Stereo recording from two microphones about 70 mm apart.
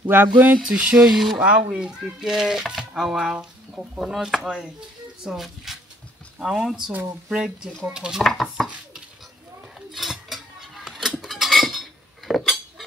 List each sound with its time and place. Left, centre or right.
0.1 s speech: right
0.6 s speech: centre
1.4 s speech: centre
8.2 s speech: centre
9.8 s a sound: centre